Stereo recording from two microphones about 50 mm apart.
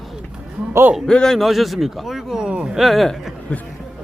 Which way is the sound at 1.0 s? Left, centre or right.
Centre.